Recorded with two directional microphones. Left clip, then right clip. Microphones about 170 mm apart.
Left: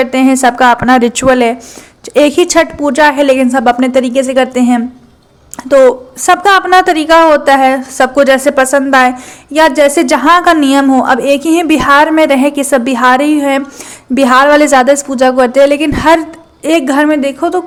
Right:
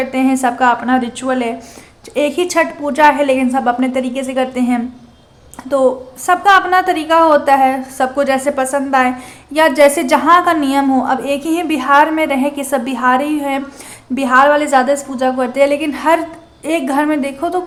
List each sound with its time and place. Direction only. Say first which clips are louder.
0.0 s a woman's voice: left 6 dB; 35° left (ahead or behind)
6.2 s a woman's voice: left 3 dB; 35° left (ahead or behind)